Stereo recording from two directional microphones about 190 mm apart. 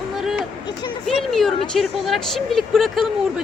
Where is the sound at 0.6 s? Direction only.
25° left (ahead or behind).